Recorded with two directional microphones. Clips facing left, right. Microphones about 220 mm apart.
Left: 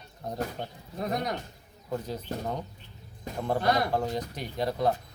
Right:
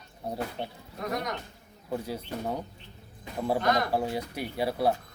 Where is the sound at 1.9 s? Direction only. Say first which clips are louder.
Even; 10° right (ahead or behind).